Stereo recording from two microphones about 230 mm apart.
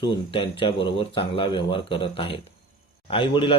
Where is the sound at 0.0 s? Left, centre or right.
Left.